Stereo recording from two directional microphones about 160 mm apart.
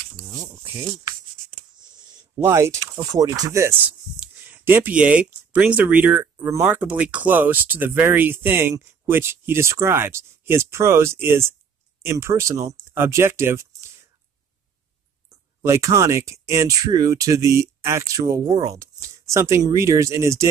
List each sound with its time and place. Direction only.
0.5 s a sound: 15° right (ahead or behind)
2.3 s speech: 15° right (ahead or behind)
15.6 s speech: 20° right (ahead or behind)